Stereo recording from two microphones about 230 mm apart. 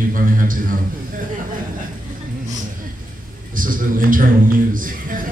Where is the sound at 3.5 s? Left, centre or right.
Right.